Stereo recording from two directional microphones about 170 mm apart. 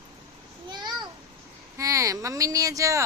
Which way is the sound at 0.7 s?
25° right (ahead or behind).